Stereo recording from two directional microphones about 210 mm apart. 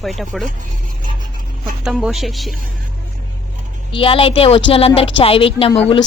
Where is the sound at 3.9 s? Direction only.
25° left (ahead or behind).